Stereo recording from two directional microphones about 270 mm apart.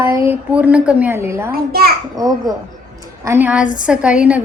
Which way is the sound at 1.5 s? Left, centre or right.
Right.